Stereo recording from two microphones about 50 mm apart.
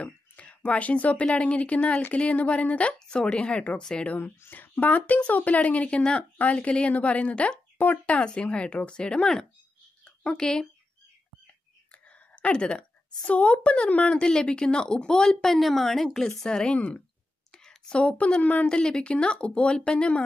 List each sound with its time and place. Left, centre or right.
0.0 s speech: left
4.5 s speech: left
7.7 s speech: left
8.2 s a woman's voice: left
12.4 s a woman's voice: centre
16.7 s speech: left
17.5 s a sound: centre
18.4 s speech: left
18.7 s speech: centre